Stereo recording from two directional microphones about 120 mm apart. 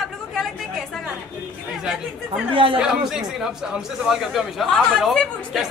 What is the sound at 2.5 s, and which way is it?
Speech, 45° right (ahead or behind).